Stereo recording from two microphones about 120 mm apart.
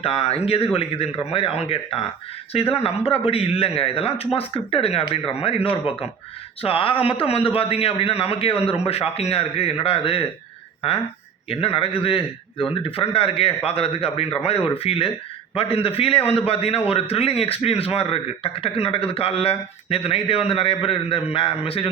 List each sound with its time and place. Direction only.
0.0 s a man's voice: 55° left (ahead or behind)
11.4 s a man's voice: 55° left (ahead or behind)